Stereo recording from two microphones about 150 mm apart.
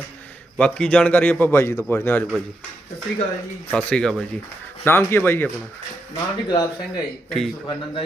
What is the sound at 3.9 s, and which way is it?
Speech, 5° left (ahead or behind).